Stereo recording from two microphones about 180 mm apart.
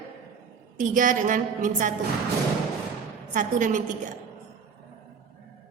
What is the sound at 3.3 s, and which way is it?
Speech, 45° right (ahead or behind).